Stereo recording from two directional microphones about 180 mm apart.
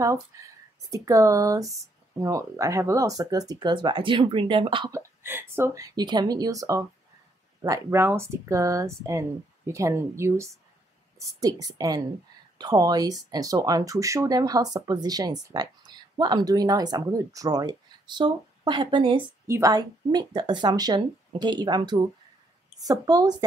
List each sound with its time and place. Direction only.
0.3 s speech: 20° right (ahead or behind)
4.9 s speech: 10° right (ahead or behind)